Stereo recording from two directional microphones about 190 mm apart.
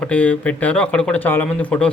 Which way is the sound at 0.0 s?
5° left (ahead or behind).